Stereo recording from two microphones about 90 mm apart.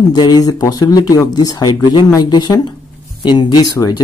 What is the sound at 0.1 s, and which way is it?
Speech, 50° left (ahead or behind).